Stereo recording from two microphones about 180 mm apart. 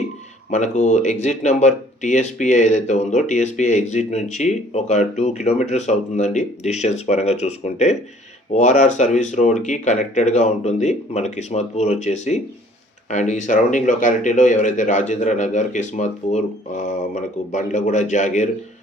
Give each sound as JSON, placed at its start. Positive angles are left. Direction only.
{"t": 0.5, "sound": "speech", "side_deg": 40}